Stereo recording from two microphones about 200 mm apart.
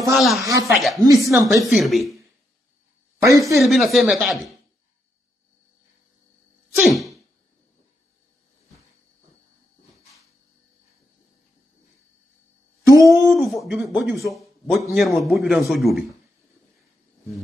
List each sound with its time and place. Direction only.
0.1 s a man's voice: centre (ahead or behind)
0.4 s speech: 15° right (ahead or behind)
0.7 s a man's voice: centre (ahead or behind)
3.2 s speech: 15° right (ahead or behind)
3.5 s a man's voice: centre (ahead or behind)
6.7 s sneeze: centre (ahead or behind)
12.8 s a sound: 15° right (ahead or behind)
13.1 s a man's voice: centre (ahead or behind)